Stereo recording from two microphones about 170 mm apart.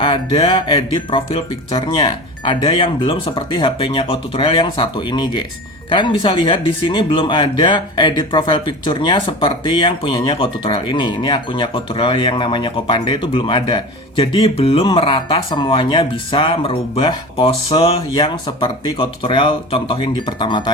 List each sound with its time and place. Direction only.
0.0 s speech: 30° left (ahead or behind)
18.1 s speech: 25° left (ahead or behind)